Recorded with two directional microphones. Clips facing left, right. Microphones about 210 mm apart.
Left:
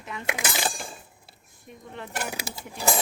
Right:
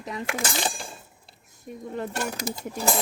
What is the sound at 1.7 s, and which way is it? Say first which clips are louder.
Speech: right 7 dB; 40° right (ahead or behind).